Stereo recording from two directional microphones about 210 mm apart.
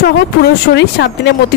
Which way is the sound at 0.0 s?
50° left (ahead or behind).